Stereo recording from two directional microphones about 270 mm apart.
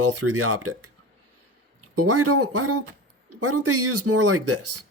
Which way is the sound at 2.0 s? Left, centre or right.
Right.